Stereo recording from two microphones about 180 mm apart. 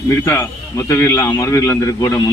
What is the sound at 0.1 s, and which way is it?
A man's voice, 15° left (ahead or behind).